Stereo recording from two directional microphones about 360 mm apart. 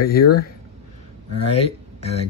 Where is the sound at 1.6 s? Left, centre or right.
Centre.